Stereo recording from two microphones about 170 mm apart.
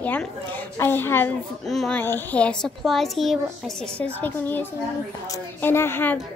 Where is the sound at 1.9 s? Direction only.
10° left (ahead or behind).